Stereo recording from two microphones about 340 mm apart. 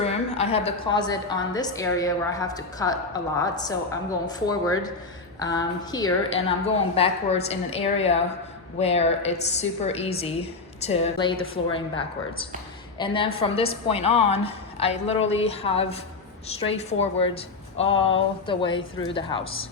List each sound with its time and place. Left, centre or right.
0.0 s a woman's voice: centre
11.3 s a woman's voice: left
11.7 s a woman's voice: centre